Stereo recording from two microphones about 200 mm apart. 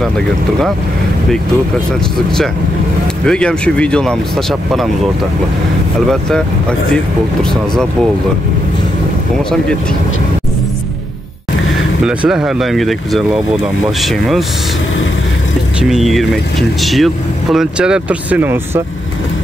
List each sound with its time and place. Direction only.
3.3 s speech: 5° left (ahead or behind)
12.0 s speech: 5° right (ahead or behind)
15.8 s speech: centre (ahead or behind)